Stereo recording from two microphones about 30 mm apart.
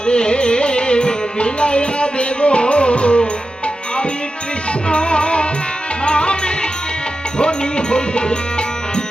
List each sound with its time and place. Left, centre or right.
0.0 s music: left
4.9 s music: left